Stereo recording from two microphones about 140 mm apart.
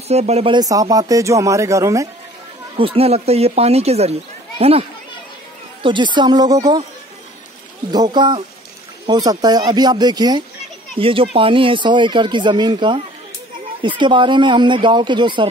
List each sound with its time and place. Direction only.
0.1 s speech: 50° right (ahead or behind)
0.5 s speech: 25° right (ahead or behind)
2.8 s speech: 45° right (ahead or behind)
7.9 s speech: 30° right (ahead or behind)
11.0 s speech: 40° right (ahead or behind)